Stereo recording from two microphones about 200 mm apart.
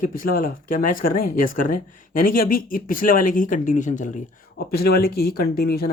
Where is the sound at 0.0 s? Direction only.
45° left (ahead or behind).